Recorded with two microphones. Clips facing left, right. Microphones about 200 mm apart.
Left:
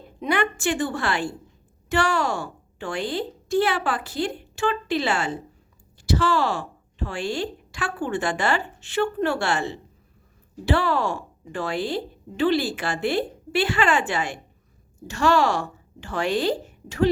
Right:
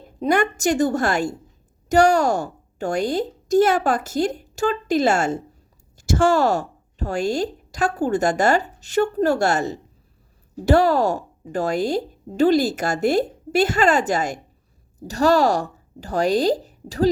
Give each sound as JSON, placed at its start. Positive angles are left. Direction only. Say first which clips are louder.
{"t": 0.2, "sound": "a woman's voice", "louder": "right 5 dB", "side_deg": -40}